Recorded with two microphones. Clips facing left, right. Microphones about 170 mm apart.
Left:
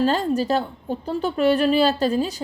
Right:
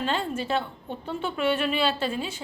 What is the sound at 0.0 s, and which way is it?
A woman's voice, 40° left (ahead or behind).